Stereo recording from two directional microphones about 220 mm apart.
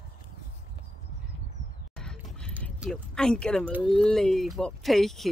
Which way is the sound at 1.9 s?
5° left (ahead or behind).